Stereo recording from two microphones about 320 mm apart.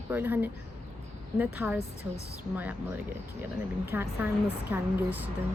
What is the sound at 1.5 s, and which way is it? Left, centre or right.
Speech, centre.